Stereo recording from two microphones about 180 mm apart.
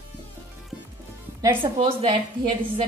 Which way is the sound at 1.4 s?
30° right (ahead or behind).